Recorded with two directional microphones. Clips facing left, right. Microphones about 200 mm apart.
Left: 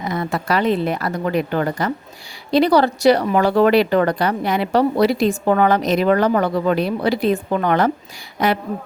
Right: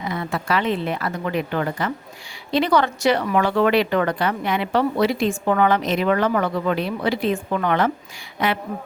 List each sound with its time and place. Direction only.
0.0 s speech: 40° left (ahead or behind)